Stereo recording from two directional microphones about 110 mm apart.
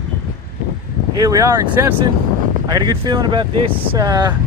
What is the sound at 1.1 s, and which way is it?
Speech, 35° right (ahead or behind).